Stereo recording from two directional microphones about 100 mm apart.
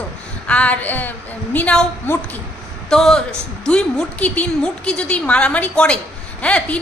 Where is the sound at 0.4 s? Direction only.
10° left (ahead or behind).